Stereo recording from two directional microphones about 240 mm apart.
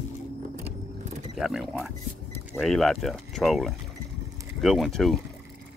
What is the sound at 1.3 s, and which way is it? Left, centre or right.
Speech, centre.